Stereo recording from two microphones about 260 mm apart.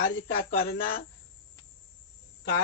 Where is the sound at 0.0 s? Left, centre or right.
Left.